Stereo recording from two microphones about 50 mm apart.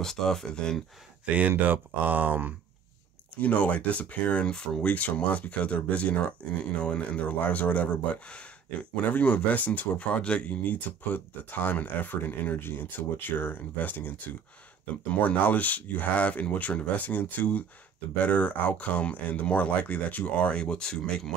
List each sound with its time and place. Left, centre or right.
0.0 s speech: centre
1.7 s speech: right
3.3 s speech: left
8.9 s speech: left; by 21.0 s centre